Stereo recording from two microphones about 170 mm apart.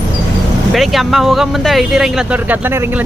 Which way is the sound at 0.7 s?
Centre (ahead or behind).